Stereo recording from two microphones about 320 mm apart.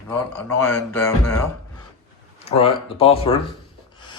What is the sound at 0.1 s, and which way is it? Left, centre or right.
Speech, centre.